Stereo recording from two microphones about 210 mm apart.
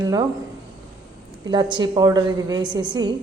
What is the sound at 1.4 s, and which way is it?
A woman's voice, 20° right (ahead or behind).